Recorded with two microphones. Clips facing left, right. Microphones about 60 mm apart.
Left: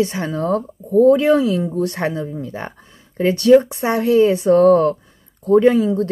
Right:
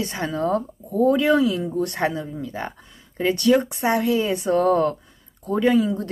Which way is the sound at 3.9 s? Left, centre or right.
Left.